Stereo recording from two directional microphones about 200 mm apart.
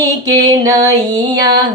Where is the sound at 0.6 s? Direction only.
15° right (ahead or behind).